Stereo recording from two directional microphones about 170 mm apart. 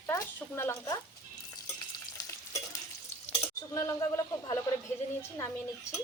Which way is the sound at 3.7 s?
20° left (ahead or behind).